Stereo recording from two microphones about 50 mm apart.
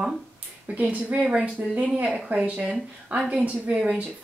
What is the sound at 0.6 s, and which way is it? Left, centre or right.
A woman's voice, right.